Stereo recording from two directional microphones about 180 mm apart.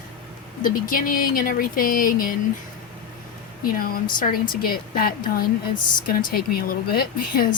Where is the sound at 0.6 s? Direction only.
50° left (ahead or behind).